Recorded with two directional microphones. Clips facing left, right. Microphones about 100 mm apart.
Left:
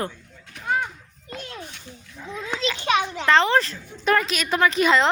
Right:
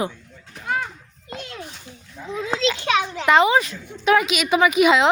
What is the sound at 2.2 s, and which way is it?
A woman's voice, 10° right (ahead or behind).